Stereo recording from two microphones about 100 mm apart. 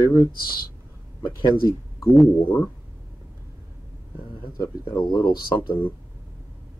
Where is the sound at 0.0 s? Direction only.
35° left (ahead or behind).